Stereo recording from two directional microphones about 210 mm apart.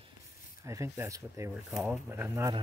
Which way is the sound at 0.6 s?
15° right (ahead or behind).